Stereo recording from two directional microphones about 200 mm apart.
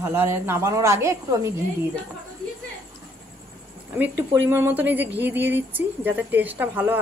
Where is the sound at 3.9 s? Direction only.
10° right (ahead or behind).